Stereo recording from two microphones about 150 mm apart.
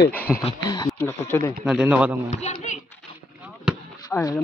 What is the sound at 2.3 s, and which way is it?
Speech, 50° left (ahead or behind).